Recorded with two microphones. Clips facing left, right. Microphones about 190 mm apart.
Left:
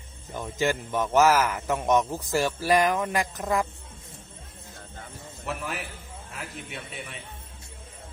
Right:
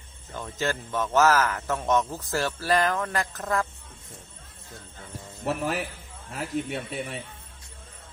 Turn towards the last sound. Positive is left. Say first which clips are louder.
# right 7 dB
turn(degrees=-40)  # may be behind; listen again after turning